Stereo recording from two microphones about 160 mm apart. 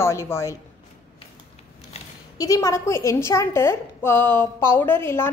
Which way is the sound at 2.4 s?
20° left (ahead or behind).